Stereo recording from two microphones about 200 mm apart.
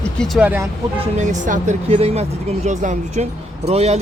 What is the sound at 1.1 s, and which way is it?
Speech, 40° right (ahead or behind).